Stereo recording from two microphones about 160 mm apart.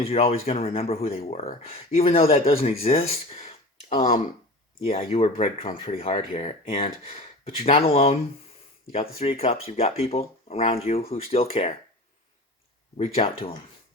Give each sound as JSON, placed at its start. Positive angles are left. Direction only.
{"t": 0.0, "sound": "speech", "side_deg": 40}
{"t": 13.0, "sound": "speech", "side_deg": 40}